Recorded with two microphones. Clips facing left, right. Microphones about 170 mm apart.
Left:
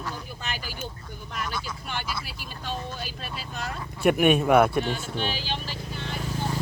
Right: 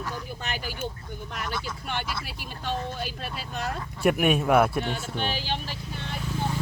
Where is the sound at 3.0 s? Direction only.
60° right (ahead or behind).